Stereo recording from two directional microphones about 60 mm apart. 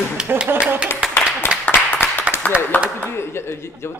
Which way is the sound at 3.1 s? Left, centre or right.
Left.